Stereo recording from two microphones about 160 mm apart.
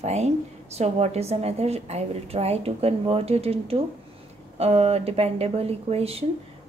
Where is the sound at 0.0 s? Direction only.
45° right (ahead or behind).